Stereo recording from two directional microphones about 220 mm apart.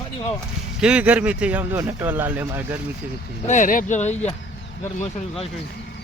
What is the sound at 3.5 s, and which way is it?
Speech, 35° left (ahead or behind).